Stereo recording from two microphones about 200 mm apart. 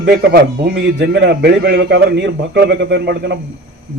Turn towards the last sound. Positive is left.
turn(degrees=-60)  # may be behind; listen again after turning